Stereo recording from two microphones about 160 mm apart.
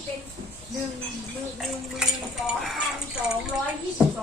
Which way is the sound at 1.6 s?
Centre (ahead or behind).